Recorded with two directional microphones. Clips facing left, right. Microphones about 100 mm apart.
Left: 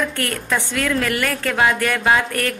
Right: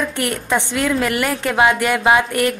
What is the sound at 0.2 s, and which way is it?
A woman's voice, 20° right (ahead or behind).